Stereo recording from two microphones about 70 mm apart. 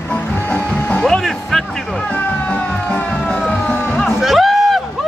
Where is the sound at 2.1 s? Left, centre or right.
Centre.